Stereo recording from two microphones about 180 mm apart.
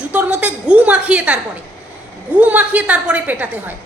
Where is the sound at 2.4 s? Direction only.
10° right (ahead or behind).